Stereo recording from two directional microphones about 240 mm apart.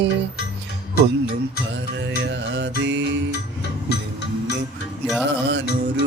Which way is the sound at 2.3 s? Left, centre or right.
Right.